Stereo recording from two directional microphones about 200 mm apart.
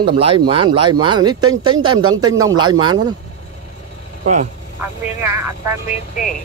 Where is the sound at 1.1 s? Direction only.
20° right (ahead or behind).